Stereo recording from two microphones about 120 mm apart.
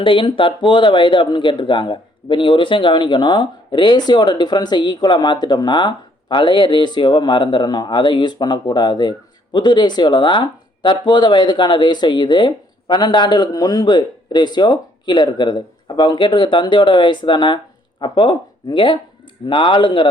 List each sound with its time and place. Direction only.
0.0 s speech: 45° left (ahead or behind)